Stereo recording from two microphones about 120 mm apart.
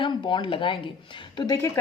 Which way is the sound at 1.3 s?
30° left (ahead or behind).